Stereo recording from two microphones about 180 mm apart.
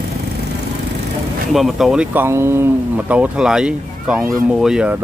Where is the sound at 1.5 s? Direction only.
Centre (ahead or behind).